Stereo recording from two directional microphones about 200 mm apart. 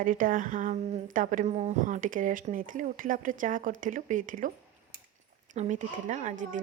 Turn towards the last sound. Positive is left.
turn(degrees=-40)  # may be behind; listen again after turning